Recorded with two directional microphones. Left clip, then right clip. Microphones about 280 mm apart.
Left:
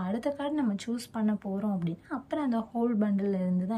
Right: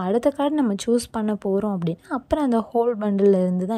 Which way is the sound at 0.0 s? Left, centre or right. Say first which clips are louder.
Right 11 dB; centre.